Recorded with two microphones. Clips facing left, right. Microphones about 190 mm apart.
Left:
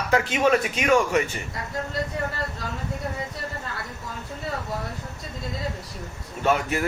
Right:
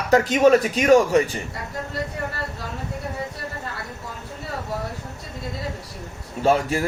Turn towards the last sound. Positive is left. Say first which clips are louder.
# right 3 dB
turn(degrees=-30)  # may be behind; listen again after turning